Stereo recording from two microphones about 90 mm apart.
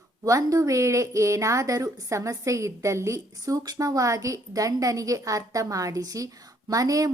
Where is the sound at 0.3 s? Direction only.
40° right (ahead or behind).